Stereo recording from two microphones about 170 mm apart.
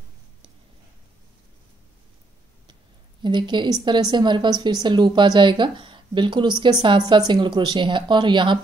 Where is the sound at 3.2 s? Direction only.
25° right (ahead or behind).